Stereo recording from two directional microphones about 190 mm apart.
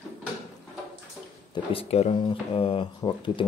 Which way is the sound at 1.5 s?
30° left (ahead or behind).